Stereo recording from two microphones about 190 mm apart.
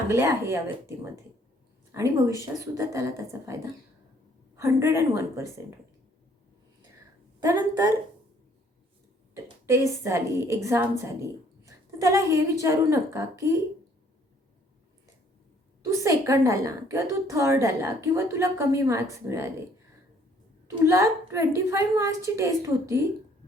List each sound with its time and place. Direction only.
0.1 s a woman's voice: 15° right (ahead or behind)
7.3 s a woman's voice: 20° right (ahead or behind)
9.3 s a woman's voice: 15° right (ahead or behind)
15.9 s a woman's voice: 15° right (ahead or behind)
20.8 s a woman's voice: 15° right (ahead or behind)